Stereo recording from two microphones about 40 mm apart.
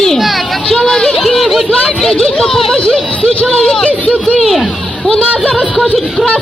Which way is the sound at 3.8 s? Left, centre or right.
Left.